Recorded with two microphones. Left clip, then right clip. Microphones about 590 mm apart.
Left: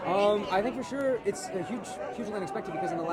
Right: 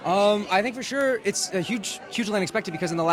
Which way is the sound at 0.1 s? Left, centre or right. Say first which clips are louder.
Right 5 dB; right.